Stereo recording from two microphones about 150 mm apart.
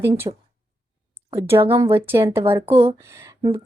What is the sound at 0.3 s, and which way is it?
Speech, 35° right (ahead or behind).